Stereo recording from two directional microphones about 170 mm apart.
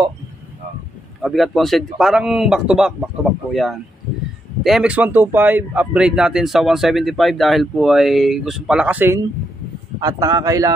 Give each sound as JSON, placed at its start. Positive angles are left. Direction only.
{"t": 1.2, "sound": "a man's voice", "side_deg": 0}
{"t": 9.9, "sound": "speech", "side_deg": -25}